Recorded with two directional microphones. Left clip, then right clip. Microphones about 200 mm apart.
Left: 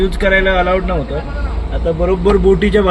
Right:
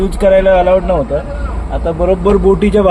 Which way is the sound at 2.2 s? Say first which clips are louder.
Left 1 dB; 5° right (ahead or behind).